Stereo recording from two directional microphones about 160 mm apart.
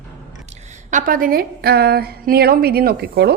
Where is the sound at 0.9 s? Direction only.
55° right (ahead or behind).